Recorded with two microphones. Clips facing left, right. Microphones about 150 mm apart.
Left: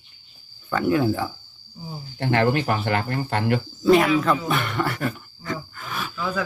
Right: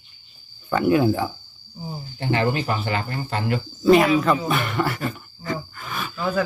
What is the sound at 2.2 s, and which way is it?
Speech, 60° left (ahead or behind).